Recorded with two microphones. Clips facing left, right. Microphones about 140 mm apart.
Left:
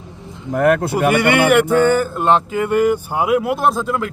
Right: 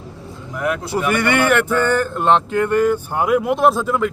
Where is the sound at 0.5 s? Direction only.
55° left (ahead or behind).